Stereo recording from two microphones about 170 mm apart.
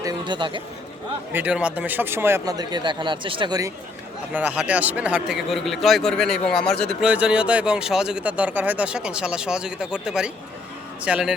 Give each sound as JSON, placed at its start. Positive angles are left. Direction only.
{"t": 0.0, "sound": "speech", "side_deg": -25}
{"t": 1.3, "sound": "speech", "side_deg": -10}
{"t": 4.4, "sound": "speech", "side_deg": -10}